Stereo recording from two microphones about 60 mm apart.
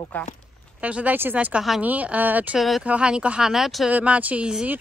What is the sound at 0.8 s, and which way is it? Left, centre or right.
Speech, right.